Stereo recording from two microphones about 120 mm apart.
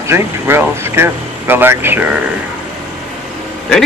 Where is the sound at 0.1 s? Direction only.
20° right (ahead or behind).